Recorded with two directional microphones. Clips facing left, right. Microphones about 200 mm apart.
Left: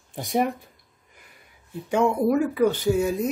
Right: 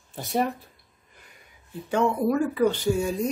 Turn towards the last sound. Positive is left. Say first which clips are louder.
# left 2 dB
turn(degrees=5)  # may be behind; listen again after turning